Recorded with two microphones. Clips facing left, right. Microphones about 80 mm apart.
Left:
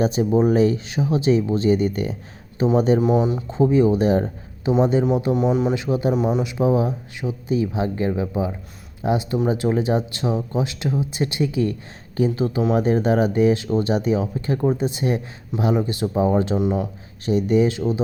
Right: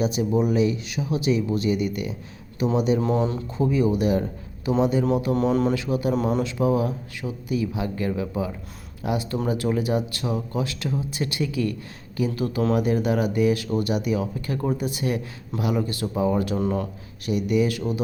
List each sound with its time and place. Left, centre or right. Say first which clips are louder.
0.0 s speech: left 4 dB; left
3.0 s speech: left 4 dB; centre
3.6 s speech: left 5 dB; left
5.3 s speech: left 1 dB; centre
5.7 s speech: left 3 dB; left
6.1 s speech: left 2 dB; centre
6.4 s speech: left 3 dB; left
16.6 s speech: left 3 dB; centre
17.2 s speech: left 4 dB; left